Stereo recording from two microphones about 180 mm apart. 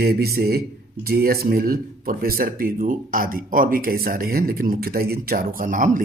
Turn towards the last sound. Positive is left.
turn(degrees=-45)  # may be behind; listen again after turning